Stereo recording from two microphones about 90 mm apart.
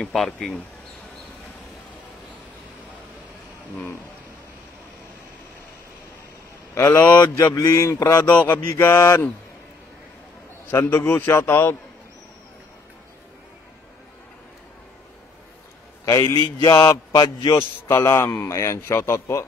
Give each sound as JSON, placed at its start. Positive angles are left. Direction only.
{"t": 0.0, "sound": "speech", "side_deg": 0}
{"t": 6.8, "sound": "mantra", "side_deg": 20}
{"t": 7.3, "sound": "a man's voice", "side_deg": 35}
{"t": 8.3, "sound": "mantra", "side_deg": 15}
{"t": 8.7, "sound": "a man's voice", "side_deg": 25}
{"t": 10.7, "sound": "a man's voice", "side_deg": 25}
{"t": 16.1, "sound": "a man's voice", "side_deg": 40}
{"t": 17.6, "sound": "a man's voice", "side_deg": 30}